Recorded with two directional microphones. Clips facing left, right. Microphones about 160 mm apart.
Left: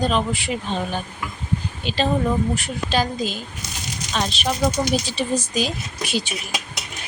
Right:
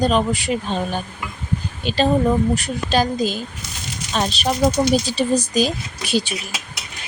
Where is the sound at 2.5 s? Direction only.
40° right (ahead or behind).